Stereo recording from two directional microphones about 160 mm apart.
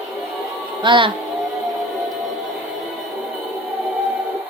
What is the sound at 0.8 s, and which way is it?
Speech, 30° right (ahead or behind).